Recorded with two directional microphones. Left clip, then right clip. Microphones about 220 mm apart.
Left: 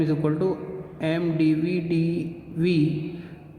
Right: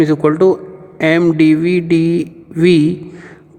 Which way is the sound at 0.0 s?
50° right (ahead or behind).